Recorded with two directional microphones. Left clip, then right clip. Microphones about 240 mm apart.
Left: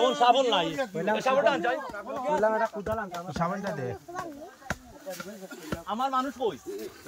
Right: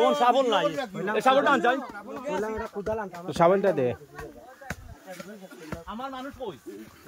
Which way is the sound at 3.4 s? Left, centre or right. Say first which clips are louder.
Right 11 dB; right.